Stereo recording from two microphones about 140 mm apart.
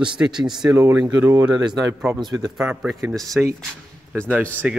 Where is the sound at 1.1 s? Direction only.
15° right (ahead or behind).